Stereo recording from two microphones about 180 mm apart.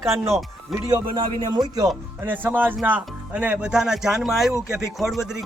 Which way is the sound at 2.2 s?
10° right (ahead or behind).